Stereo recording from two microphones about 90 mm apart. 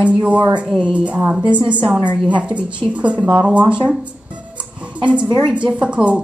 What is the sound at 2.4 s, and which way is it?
A woman's voice, 15° right (ahead or behind).